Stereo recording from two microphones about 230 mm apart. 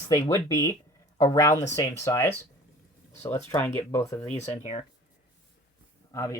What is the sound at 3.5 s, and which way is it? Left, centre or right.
Speech, centre.